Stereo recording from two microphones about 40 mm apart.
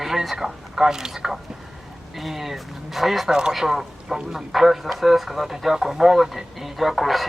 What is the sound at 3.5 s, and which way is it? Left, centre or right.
Speech, centre.